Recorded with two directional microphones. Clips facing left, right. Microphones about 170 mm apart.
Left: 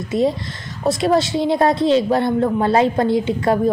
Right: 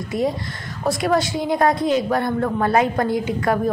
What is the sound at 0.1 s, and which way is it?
A woman's voice, 25° left (ahead or behind).